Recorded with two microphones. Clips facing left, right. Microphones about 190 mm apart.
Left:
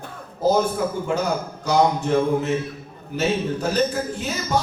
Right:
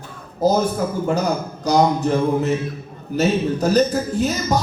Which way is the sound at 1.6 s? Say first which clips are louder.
Right 3 dB; 40° right (ahead or behind).